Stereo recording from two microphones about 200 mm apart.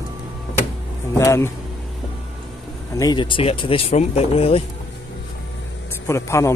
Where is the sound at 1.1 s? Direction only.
15° left (ahead or behind).